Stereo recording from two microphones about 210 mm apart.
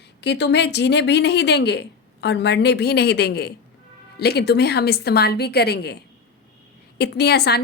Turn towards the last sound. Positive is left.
turn(degrees=50)  # may be behind; listen again after turning